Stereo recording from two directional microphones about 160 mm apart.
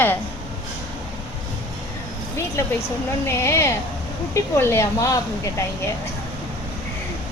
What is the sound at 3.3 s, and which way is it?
A woman's voice, 15° left (ahead or behind).